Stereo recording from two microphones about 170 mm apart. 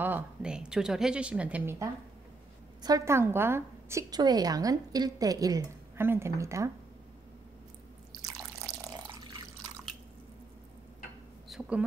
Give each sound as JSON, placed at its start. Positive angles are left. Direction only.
{"t": 0.0, "sound": "a woman's voice", "side_deg": -10}
{"t": 8.2, "sound": "water", "side_deg": -20}
{"t": 11.4, "sound": "a sound", "side_deg": -5}